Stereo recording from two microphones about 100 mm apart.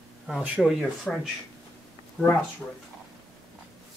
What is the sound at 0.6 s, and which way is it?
Speech, centre (ahead or behind).